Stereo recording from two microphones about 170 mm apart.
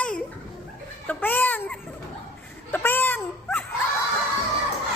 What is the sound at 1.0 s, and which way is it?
Speech, 10° left (ahead or behind).